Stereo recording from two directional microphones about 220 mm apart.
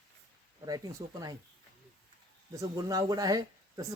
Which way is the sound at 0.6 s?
15° right (ahead or behind).